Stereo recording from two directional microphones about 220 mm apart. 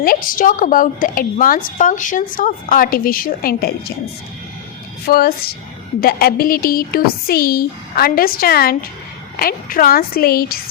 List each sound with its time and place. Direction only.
0.0 s a woman's voice: 40° left (ahead or behind)
5.0 s a woman's voice: 45° left (ahead or behind)